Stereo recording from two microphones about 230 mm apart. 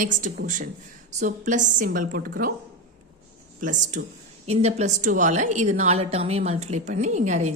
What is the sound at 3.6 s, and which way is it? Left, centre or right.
A woman's voice, right.